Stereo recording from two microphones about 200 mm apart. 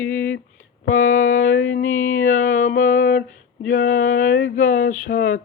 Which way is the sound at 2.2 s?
45° left (ahead or behind).